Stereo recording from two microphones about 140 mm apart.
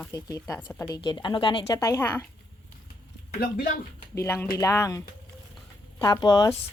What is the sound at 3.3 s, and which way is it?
Speech, 90° left.